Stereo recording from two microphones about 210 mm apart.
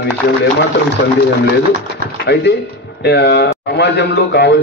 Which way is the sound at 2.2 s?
50° left (ahead or behind).